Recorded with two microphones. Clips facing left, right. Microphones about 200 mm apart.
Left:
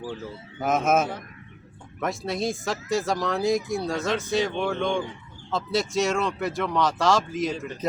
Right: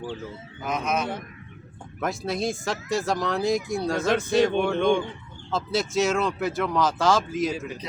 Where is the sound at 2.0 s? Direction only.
Centre (ahead or behind).